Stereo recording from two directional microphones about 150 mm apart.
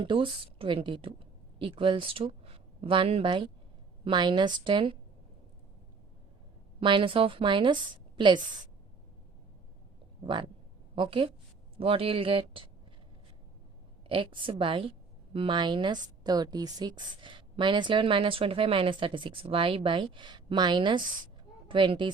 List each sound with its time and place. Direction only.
0.0 s a woman's voice: 35° right (ahead or behind)
6.7 s a woman's voice: 35° right (ahead or behind)
10.2 s a woman's voice: 35° right (ahead or behind)
14.1 s a woman's voice: 35° right (ahead or behind)